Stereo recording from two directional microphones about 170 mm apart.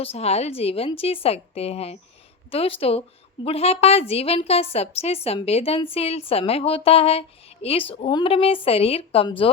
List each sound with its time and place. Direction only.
0.0 s a woman's voice: 35° left (ahead or behind)